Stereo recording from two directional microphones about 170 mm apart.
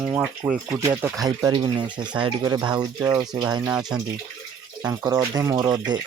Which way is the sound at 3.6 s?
5° right (ahead or behind).